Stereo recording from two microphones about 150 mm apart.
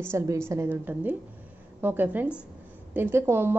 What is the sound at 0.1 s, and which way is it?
A woman's voice, 15° right (ahead or behind).